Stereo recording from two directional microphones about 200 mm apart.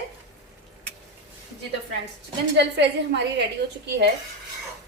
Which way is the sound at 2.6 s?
60° right (ahead or behind).